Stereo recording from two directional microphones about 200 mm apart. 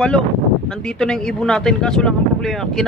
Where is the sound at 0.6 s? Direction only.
5° left (ahead or behind).